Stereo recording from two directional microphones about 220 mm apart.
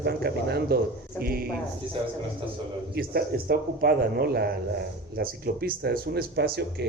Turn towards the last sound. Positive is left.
turn(degrees=-50)  # may be behind; listen again after turning